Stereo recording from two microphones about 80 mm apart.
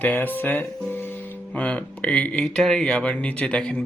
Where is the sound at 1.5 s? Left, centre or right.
Centre.